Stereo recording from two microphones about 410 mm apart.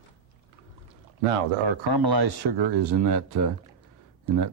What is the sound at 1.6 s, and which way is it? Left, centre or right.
Speech, right.